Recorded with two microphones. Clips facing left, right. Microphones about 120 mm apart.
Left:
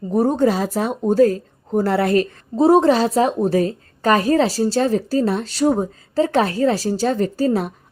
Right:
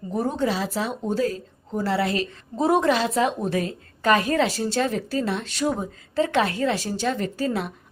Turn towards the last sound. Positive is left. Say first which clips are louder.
# left 7 dB
turn(degrees=35)  # may be behind; listen again after turning